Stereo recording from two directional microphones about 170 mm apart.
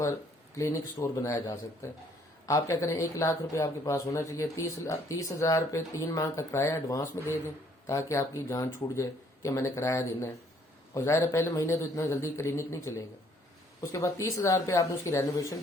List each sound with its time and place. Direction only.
0.5 s a man's voice: 15° left (ahead or behind)